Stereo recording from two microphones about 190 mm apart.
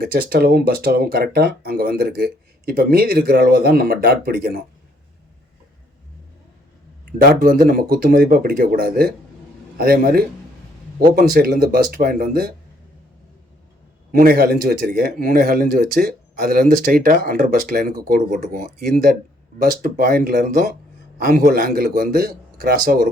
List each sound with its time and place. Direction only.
0.0 s speech: 55° right (ahead or behind)
7.2 s speech: 50° right (ahead or behind)
14.1 s speech: 50° right (ahead or behind)